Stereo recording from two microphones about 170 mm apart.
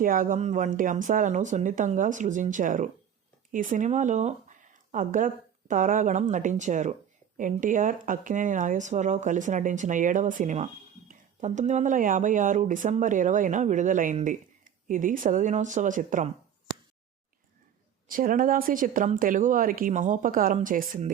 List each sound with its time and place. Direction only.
0.0 s speech: 55° right (ahead or behind)
18.1 s speech: 55° right (ahead or behind)